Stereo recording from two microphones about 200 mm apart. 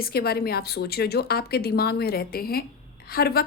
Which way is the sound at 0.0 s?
50° left (ahead or behind).